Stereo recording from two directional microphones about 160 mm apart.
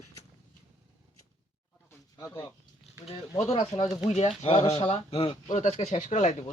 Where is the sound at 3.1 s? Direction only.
40° left (ahead or behind).